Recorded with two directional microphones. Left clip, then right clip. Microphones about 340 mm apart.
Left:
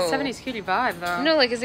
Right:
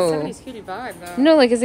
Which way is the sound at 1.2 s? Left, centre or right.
Centre.